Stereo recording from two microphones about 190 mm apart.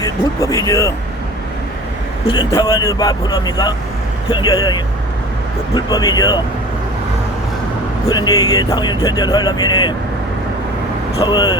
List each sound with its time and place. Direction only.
0.0 s speech: 15° left (ahead or behind)
2.2 s speech: 25° left (ahead or behind)
8.0 s speech: 20° left (ahead or behind)
11.2 s speech: 25° left (ahead or behind)